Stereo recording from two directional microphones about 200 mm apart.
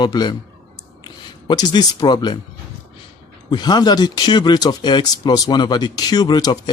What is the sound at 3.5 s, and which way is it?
Speech, 20° left (ahead or behind).